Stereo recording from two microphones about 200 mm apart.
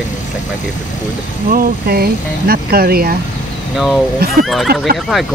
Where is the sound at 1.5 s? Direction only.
50° right (ahead or behind).